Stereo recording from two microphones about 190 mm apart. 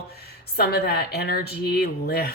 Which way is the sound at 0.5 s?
55° left (ahead or behind).